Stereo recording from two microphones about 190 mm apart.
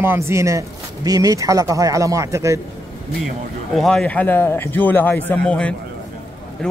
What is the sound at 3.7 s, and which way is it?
A man's voice, 5° left (ahead or behind).